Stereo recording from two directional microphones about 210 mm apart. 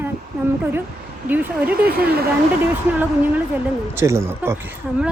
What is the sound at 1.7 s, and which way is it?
Speech, 45° right (ahead or behind).